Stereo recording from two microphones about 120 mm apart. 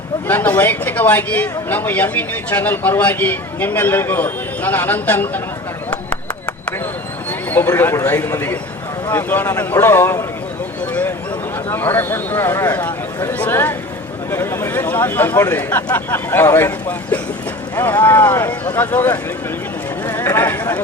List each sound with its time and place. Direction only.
0.3 s speech: 15° left (ahead or behind)
7.3 s speech: 20° left (ahead or behind)
11.7 s speech: 20° left (ahead or behind)